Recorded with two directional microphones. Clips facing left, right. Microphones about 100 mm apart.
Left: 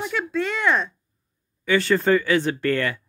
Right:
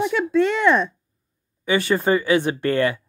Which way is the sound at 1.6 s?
15° right (ahead or behind).